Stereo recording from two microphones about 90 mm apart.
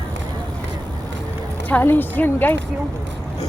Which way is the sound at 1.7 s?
20° left (ahead or behind).